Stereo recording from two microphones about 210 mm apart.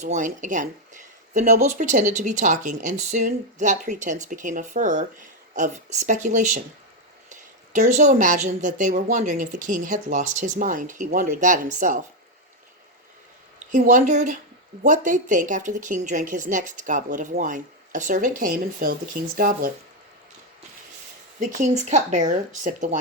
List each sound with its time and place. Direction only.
0.0 s speech: 35° right (ahead or behind)
13.7 s speech: 35° right (ahead or behind)
21.6 s speech: 35° right (ahead or behind)